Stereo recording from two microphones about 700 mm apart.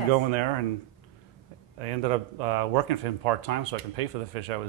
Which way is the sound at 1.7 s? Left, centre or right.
Right.